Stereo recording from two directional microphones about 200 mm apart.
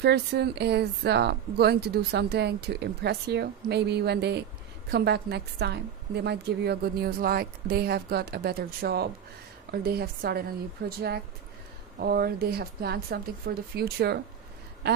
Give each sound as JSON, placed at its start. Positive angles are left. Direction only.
{"t": 0.0, "sound": "a woman's voice", "side_deg": -55}